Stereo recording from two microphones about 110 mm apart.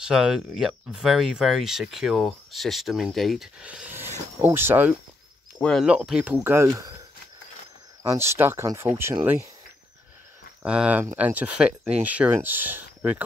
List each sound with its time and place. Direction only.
0.0 s speech: 5° right (ahead or behind)
4.4 s speech: 20° right (ahead or behind)
5.6 s speech: 5° left (ahead or behind)
5.9 s speech: 5° right (ahead or behind)
6.4 s speech: 25° right (ahead or behind)
8.2 s speech: 25° right (ahead or behind)
10.6 s speech: 10° right (ahead or behind)